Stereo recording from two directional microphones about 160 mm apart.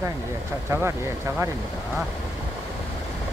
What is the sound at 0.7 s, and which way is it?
Speech, 15° right (ahead or behind).